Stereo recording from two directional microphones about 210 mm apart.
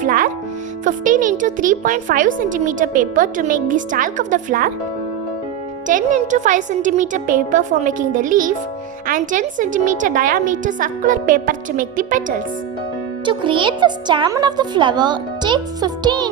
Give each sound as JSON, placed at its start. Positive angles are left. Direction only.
{"t": 0.0, "sound": "music", "side_deg": -40}
{"t": 0.9, "sound": "speech", "side_deg": -40}
{"t": 5.9, "sound": "speech", "side_deg": -35}
{"t": 13.2, "sound": "speech", "side_deg": -25}